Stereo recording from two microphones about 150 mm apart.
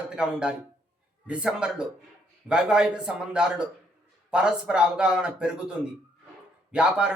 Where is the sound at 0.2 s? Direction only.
5° right (ahead or behind).